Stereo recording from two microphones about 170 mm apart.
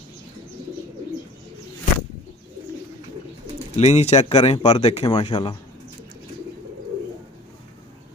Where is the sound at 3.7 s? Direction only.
40° left (ahead or behind).